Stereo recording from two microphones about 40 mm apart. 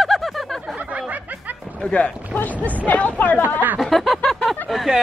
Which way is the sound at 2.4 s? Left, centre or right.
Left.